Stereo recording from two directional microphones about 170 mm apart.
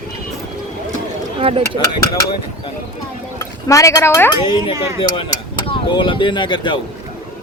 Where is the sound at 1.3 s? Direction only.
30° right (ahead or behind).